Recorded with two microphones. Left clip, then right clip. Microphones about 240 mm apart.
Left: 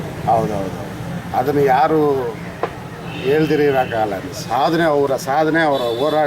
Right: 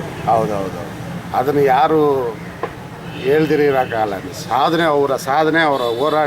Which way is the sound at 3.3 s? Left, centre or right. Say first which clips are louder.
Right 1 dB; centre.